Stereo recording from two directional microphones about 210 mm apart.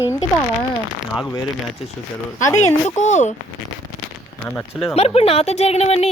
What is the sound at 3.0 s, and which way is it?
Speech, 35° left (ahead or behind).